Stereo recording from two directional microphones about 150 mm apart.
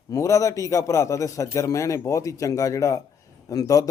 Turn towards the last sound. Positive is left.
turn(degrees=25)  # may be behind; listen again after turning